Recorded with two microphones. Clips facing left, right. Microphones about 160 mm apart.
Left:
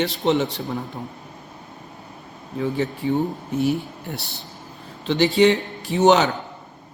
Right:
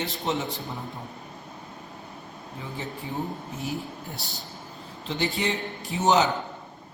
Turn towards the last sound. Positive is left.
turn(degrees=75)  # may be behind; listen again after turning